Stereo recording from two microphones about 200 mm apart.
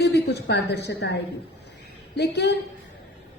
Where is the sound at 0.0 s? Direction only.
55° left (ahead or behind).